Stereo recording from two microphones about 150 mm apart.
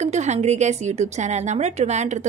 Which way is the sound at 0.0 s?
50° right (ahead or behind).